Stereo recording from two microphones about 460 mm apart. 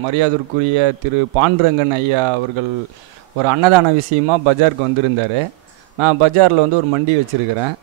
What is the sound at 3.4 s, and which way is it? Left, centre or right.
Speech, right.